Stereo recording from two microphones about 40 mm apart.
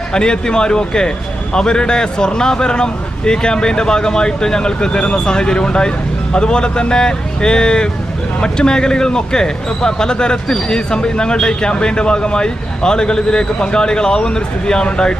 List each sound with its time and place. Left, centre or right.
0.1 s speech: left